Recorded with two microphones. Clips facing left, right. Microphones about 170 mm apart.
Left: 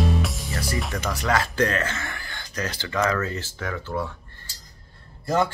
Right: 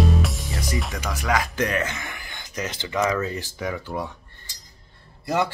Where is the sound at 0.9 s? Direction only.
10° right (ahead or behind).